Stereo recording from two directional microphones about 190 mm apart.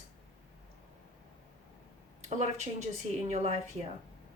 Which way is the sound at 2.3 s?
35° right (ahead or behind).